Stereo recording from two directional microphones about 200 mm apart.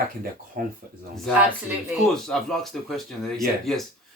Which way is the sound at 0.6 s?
40° right (ahead or behind).